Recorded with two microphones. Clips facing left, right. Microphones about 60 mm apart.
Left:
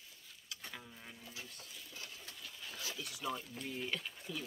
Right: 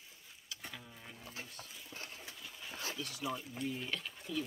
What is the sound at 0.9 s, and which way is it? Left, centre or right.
Insect, centre.